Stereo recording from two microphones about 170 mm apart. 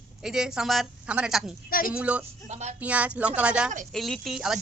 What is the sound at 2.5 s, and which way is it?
Speech, 40° right (ahead or behind).